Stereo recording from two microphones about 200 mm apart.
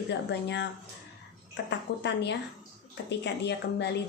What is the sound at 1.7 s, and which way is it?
Speech, 60° left (ahead or behind).